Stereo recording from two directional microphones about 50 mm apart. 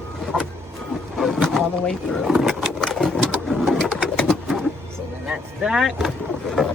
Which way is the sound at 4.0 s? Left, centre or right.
Centre.